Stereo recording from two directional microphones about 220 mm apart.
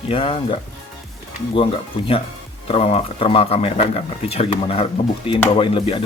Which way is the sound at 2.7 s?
30° left (ahead or behind).